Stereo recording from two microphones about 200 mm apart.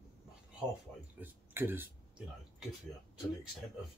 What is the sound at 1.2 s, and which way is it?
Speech, 10° right (ahead or behind).